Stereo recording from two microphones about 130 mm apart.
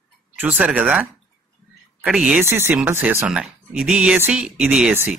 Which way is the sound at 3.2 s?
5° right (ahead or behind).